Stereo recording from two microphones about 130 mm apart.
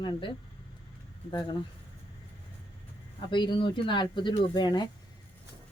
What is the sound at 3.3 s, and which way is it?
A woman's voice, 35° left (ahead or behind).